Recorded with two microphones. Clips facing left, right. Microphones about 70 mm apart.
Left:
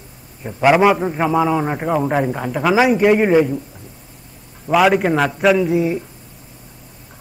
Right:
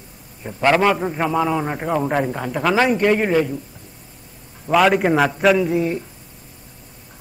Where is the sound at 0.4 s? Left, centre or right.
Centre.